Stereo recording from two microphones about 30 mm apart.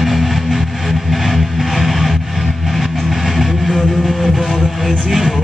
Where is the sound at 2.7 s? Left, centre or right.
Centre.